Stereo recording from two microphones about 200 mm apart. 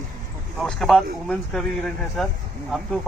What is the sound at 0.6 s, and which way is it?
Speech, centre (ahead or behind).